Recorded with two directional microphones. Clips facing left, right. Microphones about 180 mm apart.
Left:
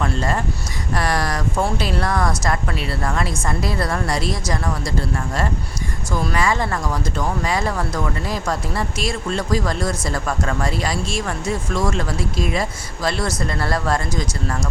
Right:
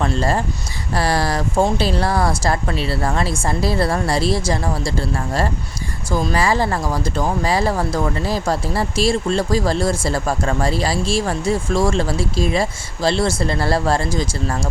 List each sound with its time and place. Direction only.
0.0 s a woman's voice: 30° right (ahead or behind)
6.1 s speech: 30° right (ahead or behind)